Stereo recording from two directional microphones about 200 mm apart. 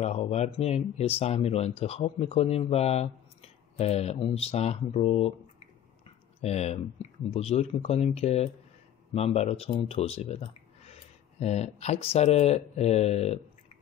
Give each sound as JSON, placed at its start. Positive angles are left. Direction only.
{"t": 0.0, "sound": "speech", "side_deg": 30}
{"t": 6.4, "sound": "speech", "side_deg": 35}